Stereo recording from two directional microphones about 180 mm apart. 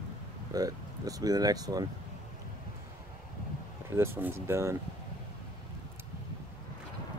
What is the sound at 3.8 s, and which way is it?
Speech, 15° right (ahead or behind).